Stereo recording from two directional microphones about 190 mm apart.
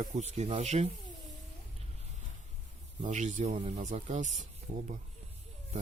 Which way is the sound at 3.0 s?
40° right (ahead or behind).